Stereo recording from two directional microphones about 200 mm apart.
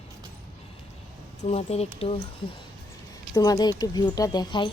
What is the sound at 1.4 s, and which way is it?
Speech, 30° left (ahead or behind).